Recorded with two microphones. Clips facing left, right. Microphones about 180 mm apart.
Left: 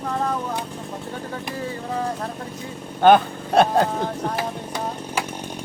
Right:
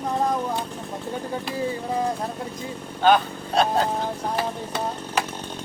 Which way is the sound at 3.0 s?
55° left (ahead or behind).